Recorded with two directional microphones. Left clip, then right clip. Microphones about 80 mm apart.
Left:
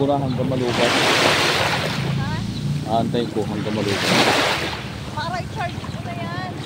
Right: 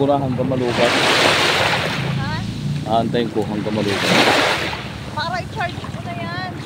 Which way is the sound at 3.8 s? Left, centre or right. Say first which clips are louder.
Right 2 dB; right.